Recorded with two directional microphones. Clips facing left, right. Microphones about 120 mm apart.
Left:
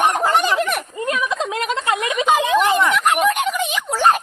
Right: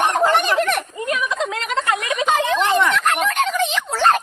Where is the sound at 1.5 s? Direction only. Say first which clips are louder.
Left 1 dB; 25° left (ahead or behind).